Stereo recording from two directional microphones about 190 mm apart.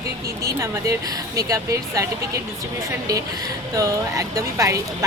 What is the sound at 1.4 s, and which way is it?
Speech, 15° right (ahead or behind).